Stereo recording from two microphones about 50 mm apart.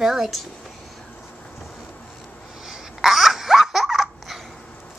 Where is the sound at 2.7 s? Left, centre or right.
Centre.